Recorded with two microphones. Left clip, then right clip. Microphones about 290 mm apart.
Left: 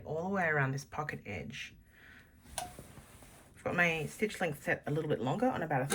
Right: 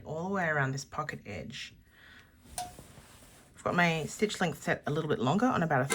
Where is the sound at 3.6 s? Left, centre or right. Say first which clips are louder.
Right 3 dB; centre.